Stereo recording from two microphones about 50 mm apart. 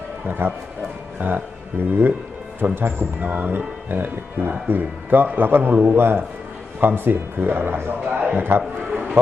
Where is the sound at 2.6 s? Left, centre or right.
Right.